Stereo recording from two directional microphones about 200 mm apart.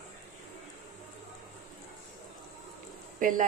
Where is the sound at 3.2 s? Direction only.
40° right (ahead or behind).